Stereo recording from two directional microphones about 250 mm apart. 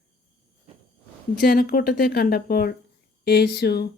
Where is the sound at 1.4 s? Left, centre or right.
Left.